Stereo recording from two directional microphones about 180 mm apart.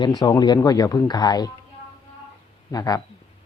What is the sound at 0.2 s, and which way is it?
Speech, 20° left (ahead or behind).